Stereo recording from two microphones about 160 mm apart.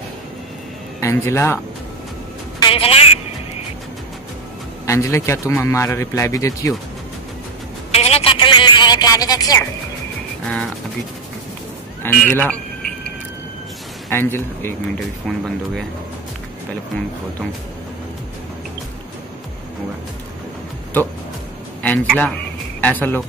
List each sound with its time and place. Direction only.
1.0 s speech: 15° left (ahead or behind)
2.6 s music: 35° left (ahead or behind)
4.8 s a man's voice: 20° left (ahead or behind)
7.9 s a woman's voice: 40° left (ahead or behind); by 9.7 s 25° left (ahead or behind)
12.0 s a sound: 10° left (ahead or behind)
14.1 s speech: 15° left (ahead or behind)
15.0 s speech: centre (ahead or behind)
21.8 s speech: 5° left (ahead or behind)